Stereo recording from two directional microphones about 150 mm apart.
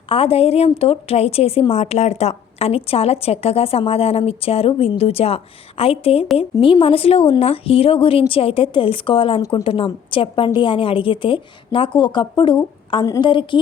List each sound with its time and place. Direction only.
0.1 s a woman's voice: 40° left (ahead or behind)